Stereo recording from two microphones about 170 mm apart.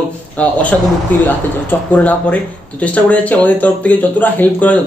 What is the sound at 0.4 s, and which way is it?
Speech, 10° left (ahead or behind).